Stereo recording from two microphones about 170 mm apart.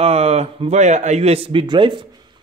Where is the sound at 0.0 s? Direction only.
35° right (ahead or behind).